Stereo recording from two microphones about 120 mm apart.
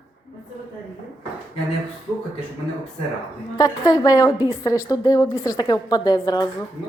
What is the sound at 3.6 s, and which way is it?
A woman's voice, 30° left (ahead or behind).